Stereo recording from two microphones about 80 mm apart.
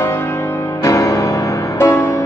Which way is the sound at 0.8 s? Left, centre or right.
Left.